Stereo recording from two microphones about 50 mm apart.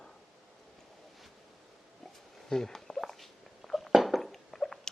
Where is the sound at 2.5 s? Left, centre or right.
Centre.